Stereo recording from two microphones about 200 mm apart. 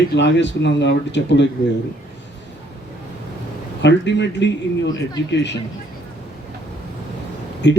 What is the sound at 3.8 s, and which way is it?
Speech, 60° left (ahead or behind).